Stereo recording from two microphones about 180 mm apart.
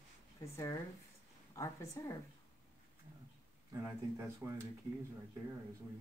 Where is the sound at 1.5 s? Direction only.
15° left (ahead or behind).